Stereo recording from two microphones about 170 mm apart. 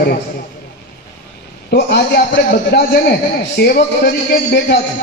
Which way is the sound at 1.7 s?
70° left (ahead or behind).